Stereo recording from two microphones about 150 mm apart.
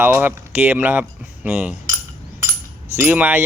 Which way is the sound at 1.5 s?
5° right (ahead or behind).